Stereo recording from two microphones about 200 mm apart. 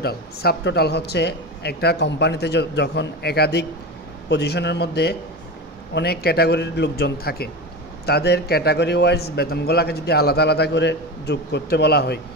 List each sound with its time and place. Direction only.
0.0 s a man's voice: 50° left (ahead or behind)